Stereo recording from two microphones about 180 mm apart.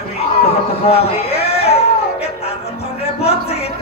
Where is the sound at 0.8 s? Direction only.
35° left (ahead or behind).